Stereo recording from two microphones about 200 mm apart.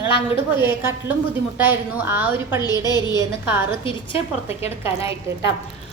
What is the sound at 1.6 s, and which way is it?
A woman's voice, 10° right (ahead or behind).